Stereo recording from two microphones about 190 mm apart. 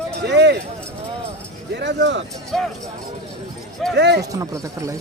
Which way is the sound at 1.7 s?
65° right (ahead or behind).